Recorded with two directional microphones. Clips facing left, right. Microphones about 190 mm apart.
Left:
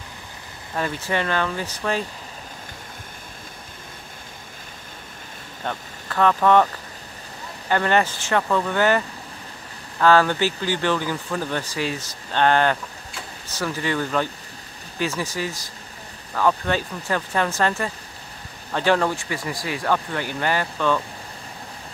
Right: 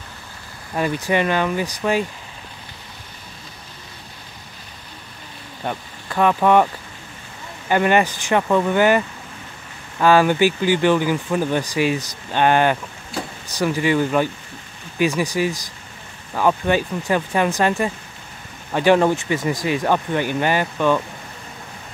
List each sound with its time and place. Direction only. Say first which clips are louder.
0.7 s speech: right 5 dB; 15° right (ahead or behind)
5.6 s speech: right 3 dB; 15° right (ahead or behind)
13.1 s a sound: right 12 dB; 40° right (ahead or behind)
13.5 s speech: right 6 dB; 15° right (ahead or behind)